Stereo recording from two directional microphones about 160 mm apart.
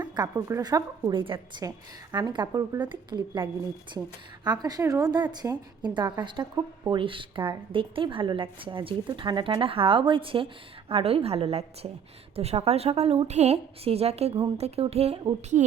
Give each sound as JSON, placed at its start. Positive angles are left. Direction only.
{"t": 0.0, "sound": "a woman's voice", "side_deg": -25}